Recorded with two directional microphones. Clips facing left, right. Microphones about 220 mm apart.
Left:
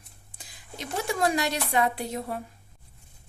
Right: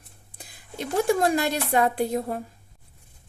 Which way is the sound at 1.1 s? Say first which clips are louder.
Right 3 dB; 50° right (ahead or behind).